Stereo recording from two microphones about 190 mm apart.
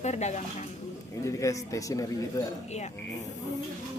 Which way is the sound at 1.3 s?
15° left (ahead or behind).